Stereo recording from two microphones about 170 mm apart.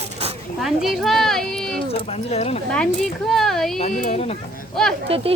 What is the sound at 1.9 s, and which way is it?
Speech, 35° left (ahead or behind).